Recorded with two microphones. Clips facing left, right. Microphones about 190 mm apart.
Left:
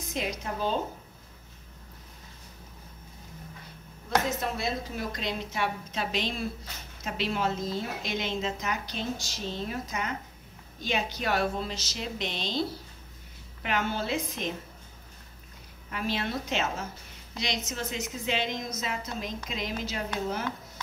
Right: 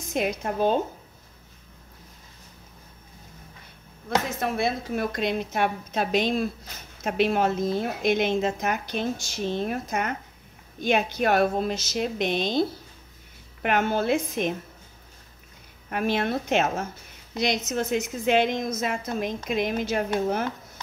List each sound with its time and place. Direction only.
0.1 s a woman's voice: 55° right (ahead or behind)
4.4 s a woman's voice: 55° right (ahead or behind)
15.9 s a woman's voice: 55° right (ahead or behind)